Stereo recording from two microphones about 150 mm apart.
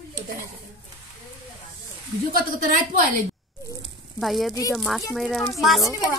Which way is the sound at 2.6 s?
60° right (ahead or behind).